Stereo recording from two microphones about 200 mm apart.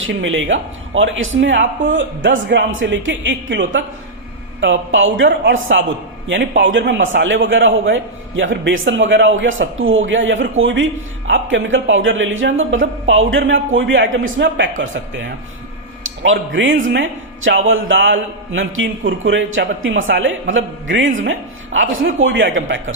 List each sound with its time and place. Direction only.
0.0 s a man's voice: 70° right (ahead or behind)
14.1 s speech: 60° right (ahead or behind)
16.0 s speech: 75° right (ahead or behind)